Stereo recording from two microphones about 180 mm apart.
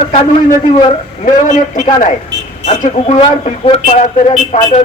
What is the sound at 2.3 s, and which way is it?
Speech, 75° right (ahead or behind).